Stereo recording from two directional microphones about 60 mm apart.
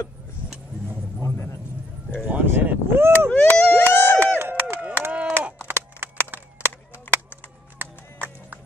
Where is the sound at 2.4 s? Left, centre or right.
Right.